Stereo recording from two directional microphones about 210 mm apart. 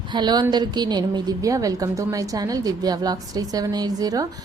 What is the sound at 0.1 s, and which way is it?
A woman's voice, 20° right (ahead or behind).